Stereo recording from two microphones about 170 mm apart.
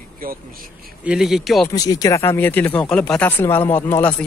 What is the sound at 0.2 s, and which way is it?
Speech, 60° right (ahead or behind).